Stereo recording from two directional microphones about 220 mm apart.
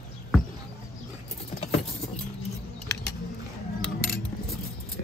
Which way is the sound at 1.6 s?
30° left (ahead or behind).